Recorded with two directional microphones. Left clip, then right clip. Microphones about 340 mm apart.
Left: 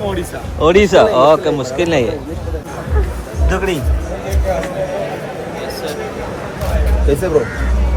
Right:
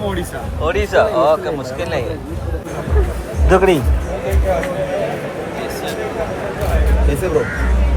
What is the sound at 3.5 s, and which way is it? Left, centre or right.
Speech, centre.